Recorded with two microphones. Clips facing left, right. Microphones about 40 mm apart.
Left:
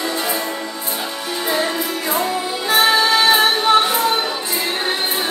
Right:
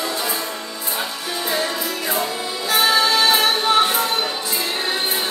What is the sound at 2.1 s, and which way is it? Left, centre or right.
Music, left.